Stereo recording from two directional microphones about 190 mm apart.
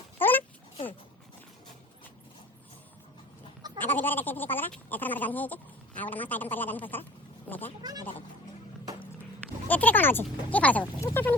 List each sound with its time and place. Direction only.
0.2 s a sound: 10° left (ahead or behind)
3.8 s speech: 10° left (ahead or behind)
7.8 s speech: 20° right (ahead or behind)
9.6 s speech: 10° left (ahead or behind)